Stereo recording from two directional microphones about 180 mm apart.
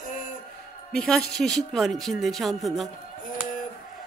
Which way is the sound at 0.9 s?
5° left (ahead or behind).